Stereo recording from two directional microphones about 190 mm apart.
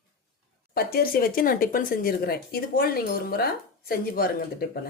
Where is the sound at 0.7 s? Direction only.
55° left (ahead or behind).